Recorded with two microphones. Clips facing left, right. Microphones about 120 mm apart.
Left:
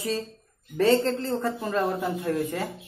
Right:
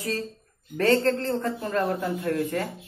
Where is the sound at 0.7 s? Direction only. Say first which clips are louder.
Even; 15° left (ahead or behind).